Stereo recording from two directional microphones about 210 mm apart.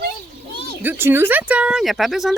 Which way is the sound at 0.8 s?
10° right (ahead or behind).